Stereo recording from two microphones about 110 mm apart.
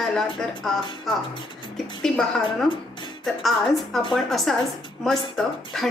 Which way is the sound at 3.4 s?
Centre (ahead or behind).